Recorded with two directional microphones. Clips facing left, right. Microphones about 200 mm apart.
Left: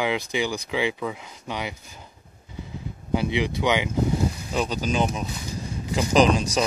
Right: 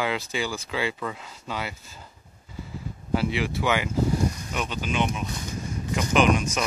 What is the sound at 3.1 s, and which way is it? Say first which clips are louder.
Speech: left 1 dB; 20° left (ahead or behind).